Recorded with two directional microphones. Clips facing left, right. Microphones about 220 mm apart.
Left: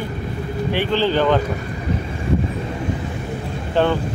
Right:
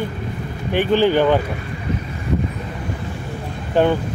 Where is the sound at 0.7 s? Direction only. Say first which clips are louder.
Right 4 dB; 15° right (ahead or behind).